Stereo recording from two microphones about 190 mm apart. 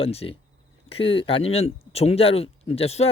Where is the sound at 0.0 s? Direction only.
30° left (ahead or behind).